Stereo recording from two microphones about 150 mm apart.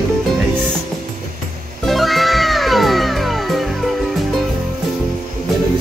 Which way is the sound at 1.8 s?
Centre (ahead or behind).